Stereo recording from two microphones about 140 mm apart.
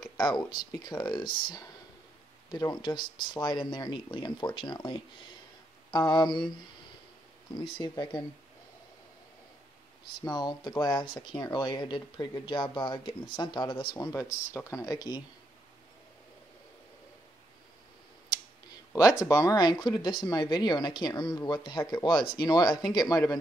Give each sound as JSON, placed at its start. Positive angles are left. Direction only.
{"t": 0.0, "sound": "a sound", "side_deg": 30}
{"t": 0.5, "sound": "speech", "side_deg": 30}
{"t": 2.5, "sound": "speech", "side_deg": 30}
{"t": 5.9, "sound": "a sound", "side_deg": 30}
{"t": 7.5, "sound": "speech", "side_deg": 35}
{"t": 10.2, "sound": "speech", "side_deg": 30}
{"t": 13.9, "sound": "speech", "side_deg": 20}
{"t": 18.9, "sound": "speech", "side_deg": 25}